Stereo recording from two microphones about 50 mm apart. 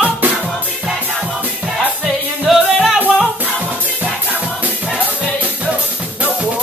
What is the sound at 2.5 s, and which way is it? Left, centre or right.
Music, centre.